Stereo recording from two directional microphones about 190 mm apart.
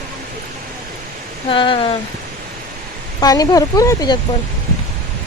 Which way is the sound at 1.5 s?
25° left (ahead or behind).